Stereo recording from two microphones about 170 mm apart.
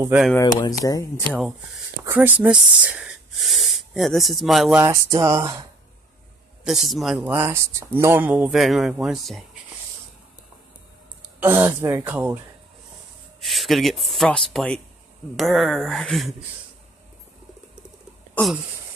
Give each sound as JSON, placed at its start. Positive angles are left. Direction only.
{"t": 0.4, "sound": "speech", "side_deg": 20}
{"t": 2.0, "sound": "speech", "side_deg": -10}
{"t": 4.8, "sound": "speech", "side_deg": -20}
{"t": 6.6, "sound": "speech", "side_deg": 0}
{"t": 11.3, "sound": "speech", "side_deg": -10}
{"t": 13.4, "sound": "speech", "side_deg": 0}
{"t": 18.3, "sound": "a sound", "side_deg": 0}